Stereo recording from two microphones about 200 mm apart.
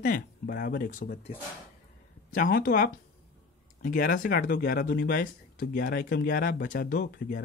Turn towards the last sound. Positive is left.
turn(degrees=50)  # may be behind; listen again after turning